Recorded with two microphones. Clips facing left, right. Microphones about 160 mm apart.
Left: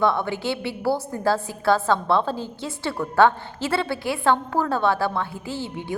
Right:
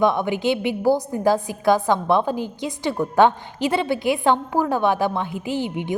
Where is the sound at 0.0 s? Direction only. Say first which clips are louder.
Right 3 dB; 15° right (ahead or behind).